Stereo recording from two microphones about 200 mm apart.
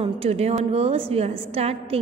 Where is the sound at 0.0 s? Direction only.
30° right (ahead or behind).